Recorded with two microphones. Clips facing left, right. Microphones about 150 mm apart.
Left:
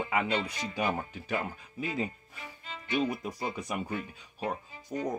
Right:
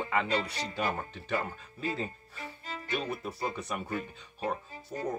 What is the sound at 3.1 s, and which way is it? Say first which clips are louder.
Speech: even; 10° left (ahead or behind).